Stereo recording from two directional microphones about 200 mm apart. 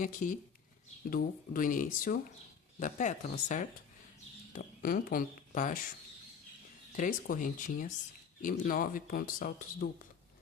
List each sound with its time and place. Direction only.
0.0 s speech: 40° left (ahead or behind)
6.9 s speech: 40° left (ahead or behind)